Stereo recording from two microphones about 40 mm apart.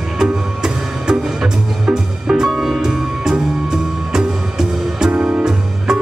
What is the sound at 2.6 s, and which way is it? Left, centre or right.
Music, centre.